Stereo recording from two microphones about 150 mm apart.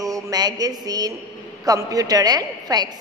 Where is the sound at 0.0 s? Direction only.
25° right (ahead or behind).